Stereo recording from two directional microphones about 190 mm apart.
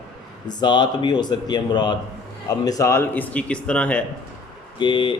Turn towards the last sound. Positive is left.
turn(degrees=25)  # may be behind; listen again after turning